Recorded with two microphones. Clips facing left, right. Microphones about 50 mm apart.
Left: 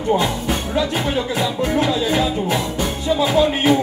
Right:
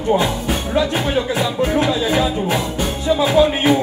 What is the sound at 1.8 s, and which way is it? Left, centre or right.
Chatter, centre.